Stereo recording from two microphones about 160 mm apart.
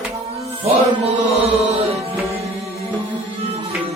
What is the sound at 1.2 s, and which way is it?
Chant, 45° right (ahead or behind).